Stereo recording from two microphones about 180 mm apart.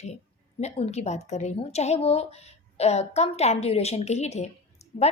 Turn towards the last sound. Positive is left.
turn(degrees=35)  # may be behind; listen again after turning